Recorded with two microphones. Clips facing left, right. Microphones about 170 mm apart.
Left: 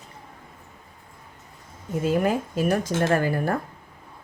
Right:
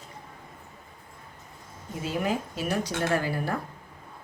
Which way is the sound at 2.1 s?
50° left (ahead or behind).